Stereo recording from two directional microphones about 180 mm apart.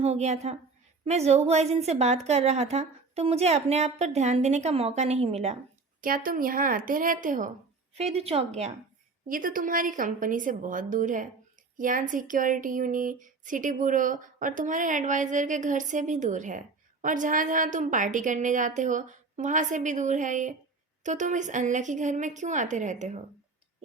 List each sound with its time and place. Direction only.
0.0 s a woman's voice: 35° right (ahead or behind)
6.0 s speech: 50° right (ahead or behind)
7.9 s a woman's voice: 35° right (ahead or behind)
9.2 s speech: 50° right (ahead or behind)